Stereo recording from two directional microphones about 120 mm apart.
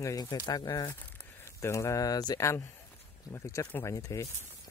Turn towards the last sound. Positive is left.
turn(degrees=30)  # may be behind; listen again after turning